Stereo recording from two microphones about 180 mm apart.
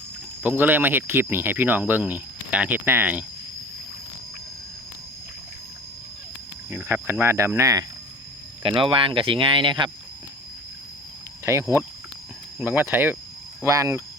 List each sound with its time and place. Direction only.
0.4 s speech: 10° right (ahead or behind)
6.7 s speech: 10° right (ahead or behind)
8.6 s speech: 30° right (ahead or behind)
11.4 s speech: 15° right (ahead or behind)